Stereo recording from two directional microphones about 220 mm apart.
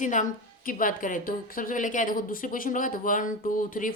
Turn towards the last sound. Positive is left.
turn(degrees=35)  # may be behind; listen again after turning